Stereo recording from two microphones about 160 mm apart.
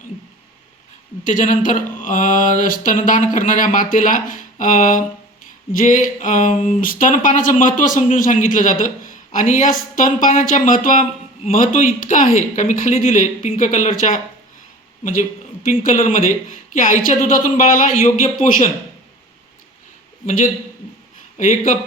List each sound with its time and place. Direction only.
1.2 s speech: 55° left (ahead or behind)
20.2 s speech: 55° left (ahead or behind)